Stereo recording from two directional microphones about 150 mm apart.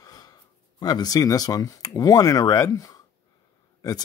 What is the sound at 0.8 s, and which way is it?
Speech, 25° left (ahead or behind).